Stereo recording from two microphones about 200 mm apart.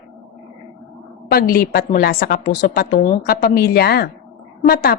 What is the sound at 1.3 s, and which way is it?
A woman's voice, 50° left (ahead or behind).